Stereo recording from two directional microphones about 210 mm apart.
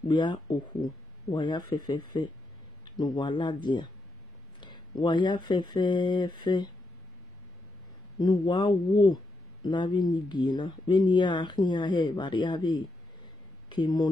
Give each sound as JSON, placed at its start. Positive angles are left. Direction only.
{"t": 0.1, "sound": "a man's voice", "side_deg": 20}
{"t": 4.6, "sound": "speech", "side_deg": 20}
{"t": 8.2, "sound": "speech", "side_deg": 20}